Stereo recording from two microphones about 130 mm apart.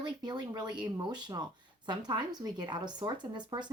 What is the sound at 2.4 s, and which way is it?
Speech, 35° right (ahead or behind).